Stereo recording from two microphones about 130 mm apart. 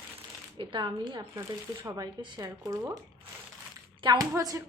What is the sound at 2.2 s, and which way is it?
Speech, 30° right (ahead or behind).